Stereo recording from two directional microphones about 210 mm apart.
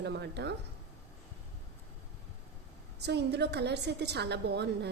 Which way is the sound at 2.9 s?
55° right (ahead or behind).